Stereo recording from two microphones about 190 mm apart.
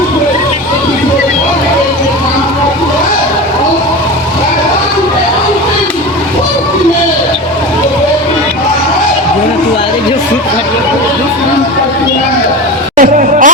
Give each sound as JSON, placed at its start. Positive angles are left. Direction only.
{"t": 13.0, "sound": "music", "side_deg": -45}